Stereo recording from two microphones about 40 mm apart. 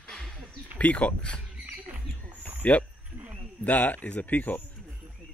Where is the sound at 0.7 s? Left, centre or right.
Left.